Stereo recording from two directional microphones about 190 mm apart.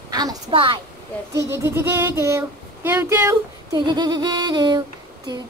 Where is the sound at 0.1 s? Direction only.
20° right (ahead or behind).